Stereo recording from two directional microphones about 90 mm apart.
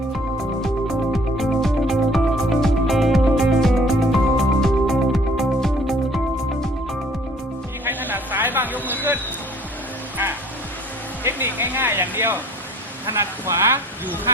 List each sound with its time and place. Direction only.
0.6 s music: centre (ahead or behind)
7.9 s a sound: 20° right (ahead or behind)
11.2 s music: 25° right (ahead or behind)
13.1 s speech: 25° right (ahead or behind)